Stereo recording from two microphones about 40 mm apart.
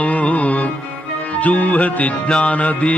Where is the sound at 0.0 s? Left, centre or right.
Left.